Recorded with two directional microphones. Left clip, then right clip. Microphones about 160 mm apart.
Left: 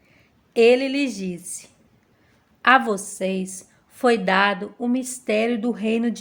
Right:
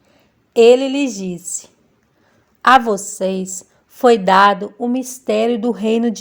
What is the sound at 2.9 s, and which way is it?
A woman's voice, 35° right (ahead or behind).